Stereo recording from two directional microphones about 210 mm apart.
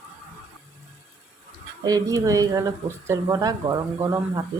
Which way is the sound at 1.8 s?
15° right (ahead or behind).